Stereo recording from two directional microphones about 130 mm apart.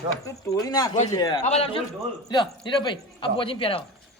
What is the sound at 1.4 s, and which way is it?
Speech, 50° left (ahead or behind).